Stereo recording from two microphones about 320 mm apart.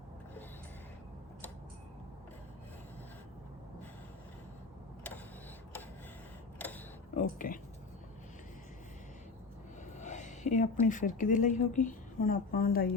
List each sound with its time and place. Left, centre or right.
7.2 s speech: left
10.0 s speech: left